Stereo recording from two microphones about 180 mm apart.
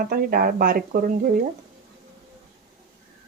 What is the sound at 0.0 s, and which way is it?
Speech, 55° right (ahead or behind).